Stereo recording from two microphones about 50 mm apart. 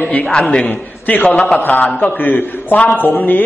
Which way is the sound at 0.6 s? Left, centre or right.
Left.